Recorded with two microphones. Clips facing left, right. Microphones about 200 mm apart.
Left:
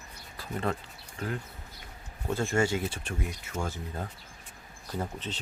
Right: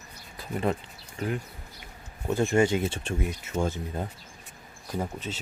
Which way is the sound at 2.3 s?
20° right (ahead or behind).